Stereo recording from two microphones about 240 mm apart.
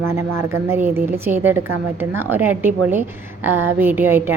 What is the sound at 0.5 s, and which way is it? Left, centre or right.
A woman's voice, centre.